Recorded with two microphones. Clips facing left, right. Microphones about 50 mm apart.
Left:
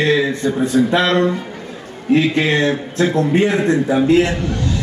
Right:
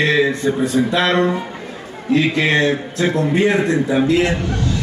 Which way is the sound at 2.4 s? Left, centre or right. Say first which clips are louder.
Even; right.